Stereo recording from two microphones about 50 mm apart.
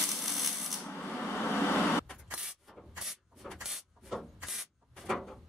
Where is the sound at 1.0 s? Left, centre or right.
Left.